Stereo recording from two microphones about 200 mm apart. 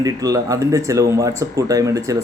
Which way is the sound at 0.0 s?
15° right (ahead or behind).